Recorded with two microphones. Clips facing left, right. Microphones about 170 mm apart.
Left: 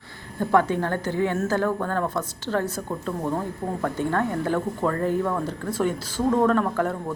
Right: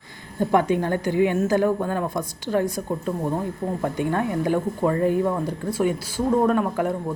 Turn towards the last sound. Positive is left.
turn(degrees=-15)  # may be behind; listen again after turning